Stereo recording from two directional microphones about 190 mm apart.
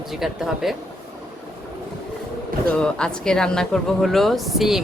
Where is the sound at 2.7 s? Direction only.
5° left (ahead or behind).